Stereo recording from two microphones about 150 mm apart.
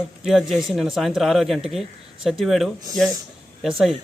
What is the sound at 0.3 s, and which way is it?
Speech, centre (ahead or behind).